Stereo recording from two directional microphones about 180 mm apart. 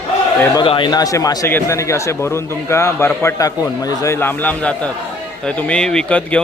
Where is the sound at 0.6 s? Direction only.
25° left (ahead or behind).